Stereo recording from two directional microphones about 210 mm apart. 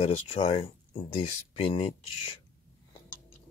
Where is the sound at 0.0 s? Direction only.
30° left (ahead or behind).